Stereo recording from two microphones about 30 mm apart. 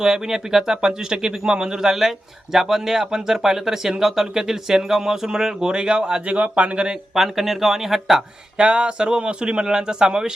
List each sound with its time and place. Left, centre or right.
0.0 s speech: centre
6.2 s speech: right
7.2 s speech: centre
8.5 s a man's voice: right